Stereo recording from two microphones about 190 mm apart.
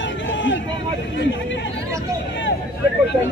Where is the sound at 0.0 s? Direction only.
75° left (ahead or behind).